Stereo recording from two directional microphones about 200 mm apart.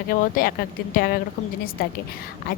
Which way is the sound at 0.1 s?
45° left (ahead or behind).